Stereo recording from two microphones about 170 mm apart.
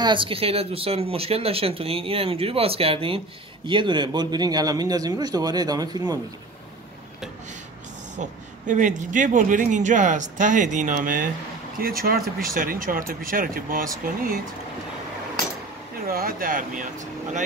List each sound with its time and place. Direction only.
0.0 s a man's voice: 30° right (ahead or behind)
8.2 s speech: 45° right (ahead or behind)
16.1 s speech: 60° right (ahead or behind)